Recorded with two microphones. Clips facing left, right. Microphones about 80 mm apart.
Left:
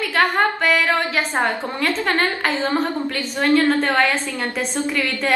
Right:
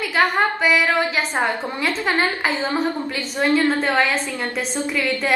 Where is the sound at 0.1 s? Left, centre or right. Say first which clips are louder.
Even; centre.